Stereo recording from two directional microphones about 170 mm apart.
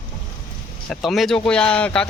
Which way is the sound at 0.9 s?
Centre (ahead or behind).